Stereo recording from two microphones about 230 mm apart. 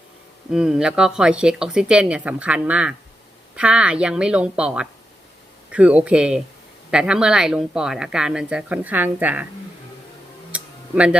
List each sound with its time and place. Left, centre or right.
0.5 s speech: centre
10.5 s tick-tock: centre